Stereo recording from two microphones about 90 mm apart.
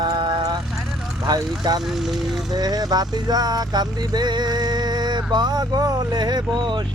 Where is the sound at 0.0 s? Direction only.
50° right (ahead or behind).